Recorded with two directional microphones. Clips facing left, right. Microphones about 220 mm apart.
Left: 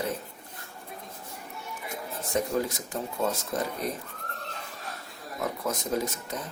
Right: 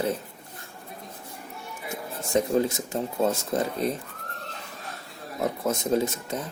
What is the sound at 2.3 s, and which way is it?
Speech, 25° right (ahead or behind).